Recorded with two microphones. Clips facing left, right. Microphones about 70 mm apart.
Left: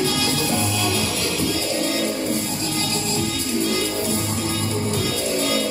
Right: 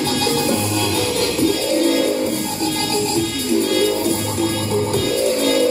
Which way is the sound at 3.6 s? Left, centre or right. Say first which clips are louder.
Right 6 dB; right.